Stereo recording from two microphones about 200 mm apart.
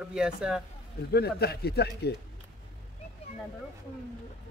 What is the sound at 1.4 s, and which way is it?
Speech, 50° left (ahead or behind).